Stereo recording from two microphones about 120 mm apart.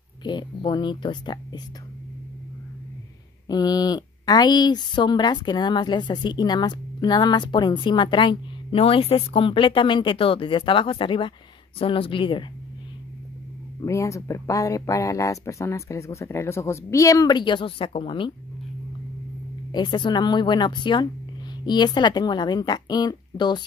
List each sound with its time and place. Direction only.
0.2 s speech: 40° left (ahead or behind)
3.4 s speech: 35° left (ahead or behind)
13.7 s speech: 25° left (ahead or behind); by 18.3 s 45° left (ahead or behind)
19.7 s speech: 40° left (ahead or behind)